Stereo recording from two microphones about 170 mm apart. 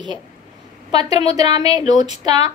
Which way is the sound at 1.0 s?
40° left (ahead or behind).